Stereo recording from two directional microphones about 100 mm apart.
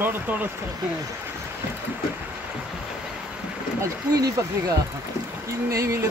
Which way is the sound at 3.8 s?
35° right (ahead or behind).